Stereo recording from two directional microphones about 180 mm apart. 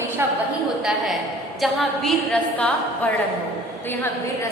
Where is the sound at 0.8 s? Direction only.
Centre (ahead or behind).